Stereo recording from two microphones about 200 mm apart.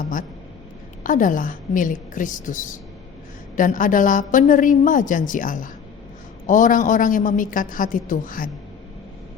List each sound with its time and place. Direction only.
1.0 s a woman's voice: 40° left (ahead or behind)